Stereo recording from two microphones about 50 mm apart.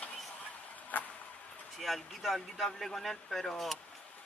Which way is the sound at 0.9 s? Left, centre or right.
Left.